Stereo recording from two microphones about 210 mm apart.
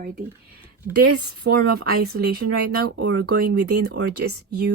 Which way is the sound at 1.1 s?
50° right (ahead or behind).